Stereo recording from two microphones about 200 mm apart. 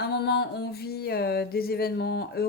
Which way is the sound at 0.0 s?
55° left (ahead or behind).